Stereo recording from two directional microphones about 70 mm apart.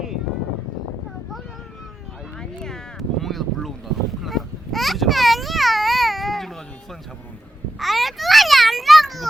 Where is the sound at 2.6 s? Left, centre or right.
Centre.